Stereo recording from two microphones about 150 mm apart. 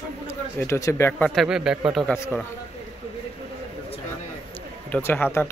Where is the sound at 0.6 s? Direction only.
20° left (ahead or behind).